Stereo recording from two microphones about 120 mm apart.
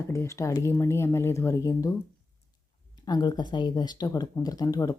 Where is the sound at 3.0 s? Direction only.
35° left (ahead or behind).